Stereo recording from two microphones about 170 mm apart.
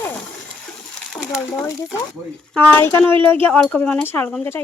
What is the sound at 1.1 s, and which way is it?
Speech, centre (ahead or behind).